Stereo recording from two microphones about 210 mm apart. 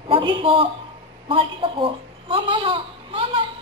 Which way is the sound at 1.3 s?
25° right (ahead or behind).